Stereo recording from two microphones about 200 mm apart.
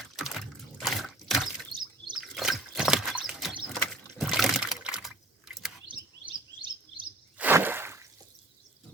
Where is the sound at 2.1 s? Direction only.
Centre (ahead or behind).